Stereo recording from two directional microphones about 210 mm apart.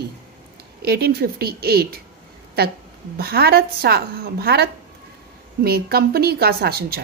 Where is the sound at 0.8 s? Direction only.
50° right (ahead or behind).